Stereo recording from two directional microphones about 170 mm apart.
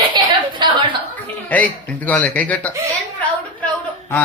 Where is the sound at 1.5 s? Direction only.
10° left (ahead or behind).